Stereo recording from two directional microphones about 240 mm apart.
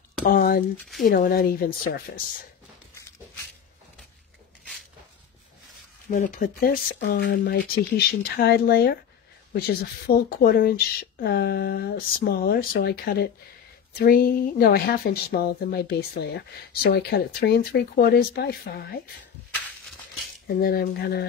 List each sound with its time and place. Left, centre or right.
0.2 s a sound: left
1.0 s speech: left
6.0 s speech: left
20.4 s speech: left